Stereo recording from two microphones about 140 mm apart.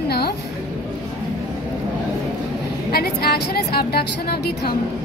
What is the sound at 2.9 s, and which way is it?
A woman's voice, 90° left.